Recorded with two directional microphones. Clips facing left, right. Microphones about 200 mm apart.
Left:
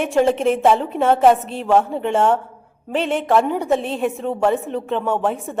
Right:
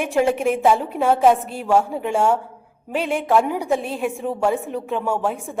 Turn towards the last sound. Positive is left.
turn(degrees=0)  # may be behind; listen again after turning